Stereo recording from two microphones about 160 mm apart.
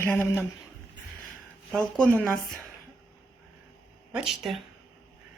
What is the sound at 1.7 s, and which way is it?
Speech, 5° left (ahead or behind).